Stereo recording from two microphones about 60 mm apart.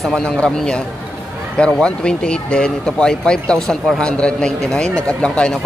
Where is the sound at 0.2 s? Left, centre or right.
Centre.